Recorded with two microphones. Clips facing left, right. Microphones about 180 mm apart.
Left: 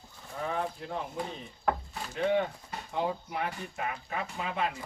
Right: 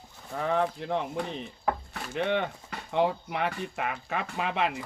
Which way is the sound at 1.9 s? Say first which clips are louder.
Even; 75° right (ahead or behind).